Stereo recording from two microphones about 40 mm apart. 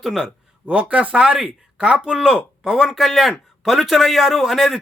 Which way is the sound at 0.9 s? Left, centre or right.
Right.